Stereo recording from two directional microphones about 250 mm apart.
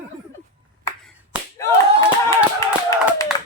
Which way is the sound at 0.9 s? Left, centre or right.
Centre.